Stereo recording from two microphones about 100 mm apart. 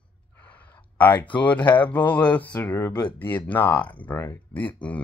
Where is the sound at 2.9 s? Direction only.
45° left (ahead or behind).